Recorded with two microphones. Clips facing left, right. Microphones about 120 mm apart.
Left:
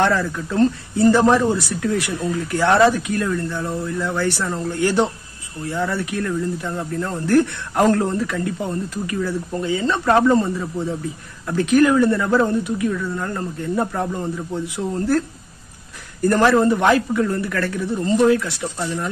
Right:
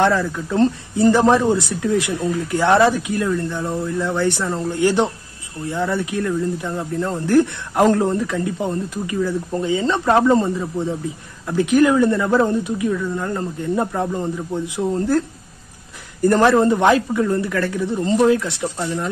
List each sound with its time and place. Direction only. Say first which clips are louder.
0.0 s speech: right 1 dB; 15° right (ahead or behind)